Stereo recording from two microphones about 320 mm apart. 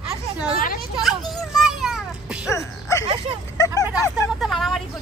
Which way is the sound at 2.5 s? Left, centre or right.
Centre.